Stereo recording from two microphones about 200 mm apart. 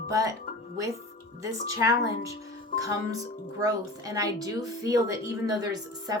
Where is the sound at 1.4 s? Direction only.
15° right (ahead or behind).